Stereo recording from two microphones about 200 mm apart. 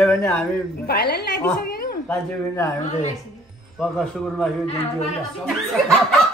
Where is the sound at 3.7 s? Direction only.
5° left (ahead or behind).